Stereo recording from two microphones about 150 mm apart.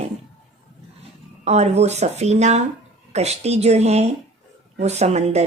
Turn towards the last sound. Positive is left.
turn(degrees=-45)  # may be behind; listen again after turning